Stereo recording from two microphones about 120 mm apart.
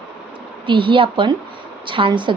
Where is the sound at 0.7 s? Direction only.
45° right (ahead or behind).